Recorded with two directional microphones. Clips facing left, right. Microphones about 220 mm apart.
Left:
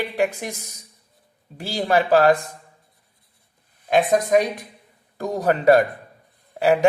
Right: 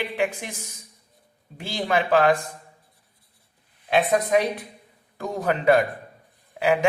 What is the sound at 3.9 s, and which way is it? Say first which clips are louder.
Speech: left 3 dB; 45° left (ahead or behind).